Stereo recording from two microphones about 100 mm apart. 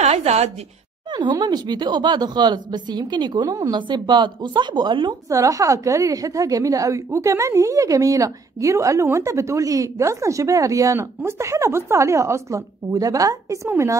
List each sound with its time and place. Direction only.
0.0 s a sound: 90° right
1.1 s speech: 45° right (ahead or behind)
3.7 s speech: 50° right (ahead or behind)
5.3 s a woman's voice: 35° right (ahead or behind)